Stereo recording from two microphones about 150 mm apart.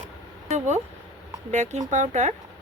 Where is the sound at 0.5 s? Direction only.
50° right (ahead or behind).